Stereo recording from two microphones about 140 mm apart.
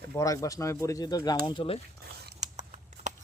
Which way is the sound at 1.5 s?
40° left (ahead or behind).